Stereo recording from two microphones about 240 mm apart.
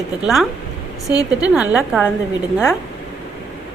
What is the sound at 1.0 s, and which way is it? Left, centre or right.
Speech, centre.